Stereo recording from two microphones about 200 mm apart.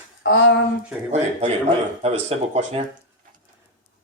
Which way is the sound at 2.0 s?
30° right (ahead or behind).